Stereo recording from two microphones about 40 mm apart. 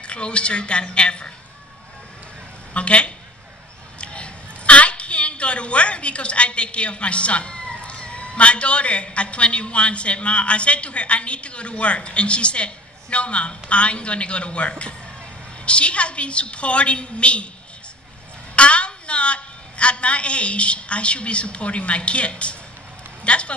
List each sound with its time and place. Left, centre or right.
0.0 s a woman's voice: left
2.7 s a woman's voice: left
18.6 s a woman's voice: left
23.2 s a sound: left